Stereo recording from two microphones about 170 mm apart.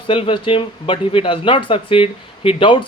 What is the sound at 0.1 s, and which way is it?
Speech, 30° left (ahead or behind).